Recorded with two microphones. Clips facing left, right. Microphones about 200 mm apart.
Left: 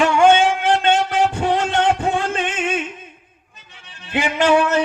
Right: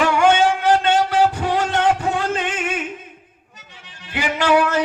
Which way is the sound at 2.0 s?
25° left (ahead or behind).